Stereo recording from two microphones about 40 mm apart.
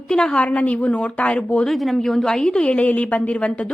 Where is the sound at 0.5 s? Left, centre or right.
Left.